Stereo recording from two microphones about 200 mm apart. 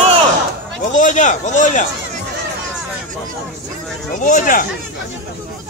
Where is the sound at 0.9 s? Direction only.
40° left (ahead or behind).